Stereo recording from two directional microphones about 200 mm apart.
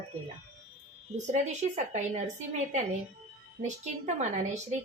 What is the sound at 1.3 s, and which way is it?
Speech, 35° right (ahead or behind).